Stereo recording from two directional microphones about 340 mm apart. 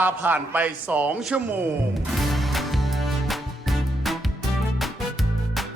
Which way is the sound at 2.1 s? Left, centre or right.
Centre.